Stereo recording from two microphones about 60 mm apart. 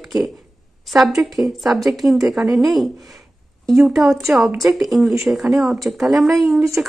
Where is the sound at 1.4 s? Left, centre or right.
Centre.